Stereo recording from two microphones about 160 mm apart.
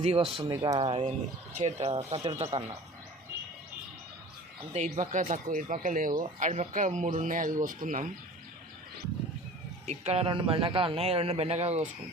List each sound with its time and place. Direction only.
0.0 s a man's voice: 40° right (ahead or behind)
0.3 s speech: 25° right (ahead or behind)
1.5 s a man's voice: 50° right (ahead or behind)
4.7 s speech: 50° right (ahead or behind)
9.8 s a man's voice: 45° right (ahead or behind)